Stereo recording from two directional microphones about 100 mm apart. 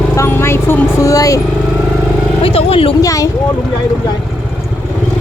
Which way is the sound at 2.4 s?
75° left (ahead or behind).